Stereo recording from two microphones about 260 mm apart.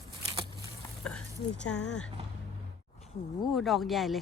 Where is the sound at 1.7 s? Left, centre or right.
Left.